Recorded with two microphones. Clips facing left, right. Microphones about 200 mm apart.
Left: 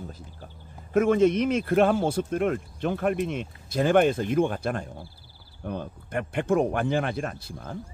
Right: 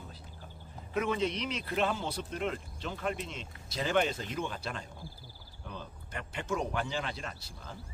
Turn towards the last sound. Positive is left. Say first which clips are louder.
# left 9 dB
turn(degrees=55)  # may be behind; listen again after turning